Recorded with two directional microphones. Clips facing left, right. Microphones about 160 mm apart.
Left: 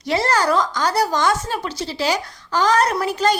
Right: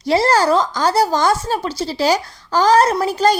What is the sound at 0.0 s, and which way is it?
A woman's voice, 35° right (ahead or behind).